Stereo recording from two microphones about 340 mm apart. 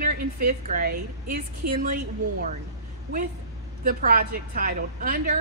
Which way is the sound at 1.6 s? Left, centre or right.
Right.